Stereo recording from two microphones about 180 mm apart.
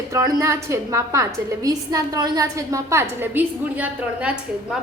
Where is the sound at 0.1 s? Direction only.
15° right (ahead or behind).